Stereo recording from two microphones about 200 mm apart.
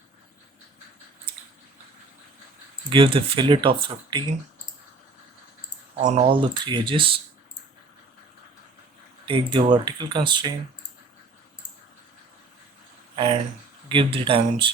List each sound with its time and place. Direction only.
2.9 s speech: 25° right (ahead or behind)
6.0 s speech: 35° right (ahead or behind)
9.2 s speech: 25° right (ahead or behind)
13.8 s speech: 25° right (ahead or behind)